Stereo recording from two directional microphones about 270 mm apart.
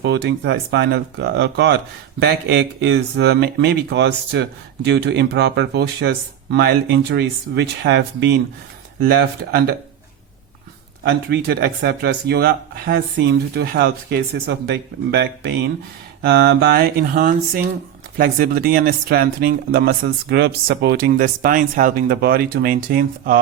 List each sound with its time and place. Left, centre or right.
0.0 s speech: right
11.0 s speech: right